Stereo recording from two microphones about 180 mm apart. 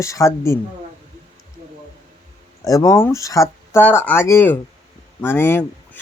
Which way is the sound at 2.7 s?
20° left (ahead or behind).